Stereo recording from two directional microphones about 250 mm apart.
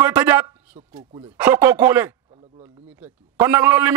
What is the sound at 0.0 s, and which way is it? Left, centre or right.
A man's voice, centre.